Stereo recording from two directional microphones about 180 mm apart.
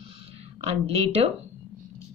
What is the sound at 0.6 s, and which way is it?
Speech, 35° right (ahead or behind).